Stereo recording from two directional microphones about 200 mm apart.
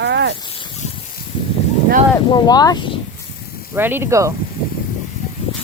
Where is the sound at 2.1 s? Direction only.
20° left (ahead or behind).